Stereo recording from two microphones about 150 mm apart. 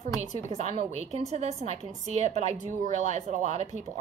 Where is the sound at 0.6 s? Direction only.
45° right (ahead or behind).